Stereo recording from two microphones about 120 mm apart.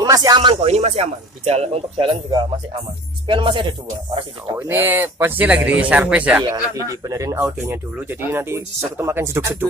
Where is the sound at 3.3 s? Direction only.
45° right (ahead or behind).